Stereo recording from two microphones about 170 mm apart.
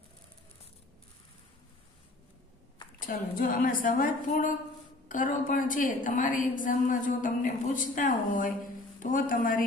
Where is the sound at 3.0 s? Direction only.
55° left (ahead or behind).